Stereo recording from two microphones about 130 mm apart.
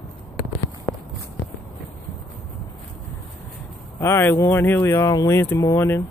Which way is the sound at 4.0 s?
20° left (ahead or behind).